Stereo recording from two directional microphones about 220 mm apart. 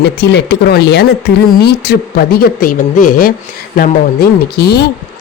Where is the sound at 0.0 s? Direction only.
50° left (ahead or behind).